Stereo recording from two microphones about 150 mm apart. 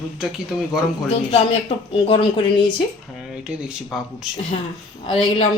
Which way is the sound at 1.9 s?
35° left (ahead or behind).